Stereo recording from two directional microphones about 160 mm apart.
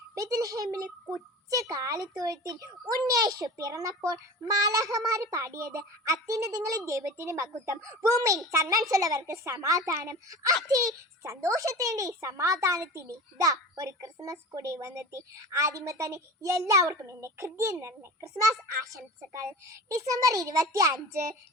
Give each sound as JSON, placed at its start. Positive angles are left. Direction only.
{"t": 0.1, "sound": "a child's voice", "side_deg": -20}